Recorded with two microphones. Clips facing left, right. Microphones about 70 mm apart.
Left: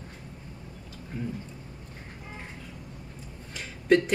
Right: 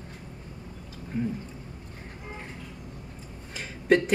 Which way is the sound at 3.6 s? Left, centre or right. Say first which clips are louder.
Even; centre.